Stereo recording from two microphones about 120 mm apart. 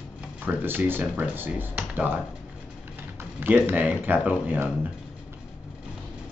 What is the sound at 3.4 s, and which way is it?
Speech, 15° right (ahead or behind).